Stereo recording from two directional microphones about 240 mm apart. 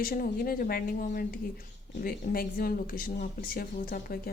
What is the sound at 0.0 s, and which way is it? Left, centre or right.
Speech, left.